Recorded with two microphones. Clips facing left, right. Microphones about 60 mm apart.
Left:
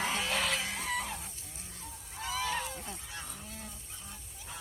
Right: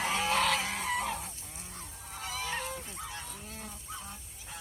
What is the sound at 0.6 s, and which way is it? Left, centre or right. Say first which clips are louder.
Fowl: right 3 dB; right.